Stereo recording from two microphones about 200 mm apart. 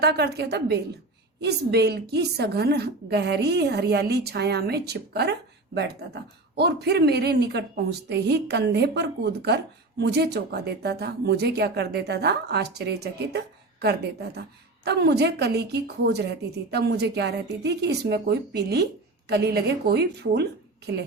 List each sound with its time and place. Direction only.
0.0 s speech: 55° right (ahead or behind)